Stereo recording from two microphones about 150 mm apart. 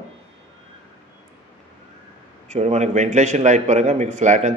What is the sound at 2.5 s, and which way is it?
A man's voice, 50° right (ahead or behind).